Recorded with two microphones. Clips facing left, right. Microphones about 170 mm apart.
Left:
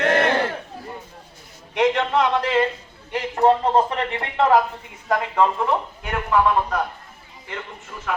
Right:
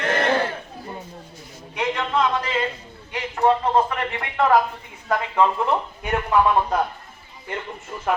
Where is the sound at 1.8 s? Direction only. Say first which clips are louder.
Left 4 dB; 75° left (ahead or behind).